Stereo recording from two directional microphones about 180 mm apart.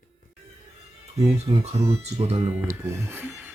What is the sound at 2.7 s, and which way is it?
Speech, 15° right (ahead or behind).